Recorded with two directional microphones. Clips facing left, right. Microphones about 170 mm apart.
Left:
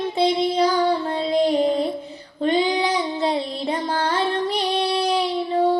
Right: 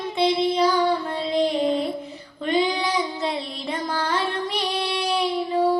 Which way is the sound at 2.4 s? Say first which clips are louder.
Left 3 dB; 30° left (ahead or behind).